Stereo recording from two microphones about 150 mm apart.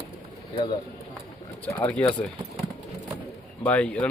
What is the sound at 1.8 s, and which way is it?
Speech, 10° left (ahead or behind).